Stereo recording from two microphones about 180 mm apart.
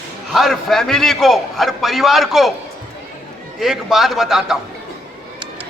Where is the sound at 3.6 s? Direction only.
Centre (ahead or behind).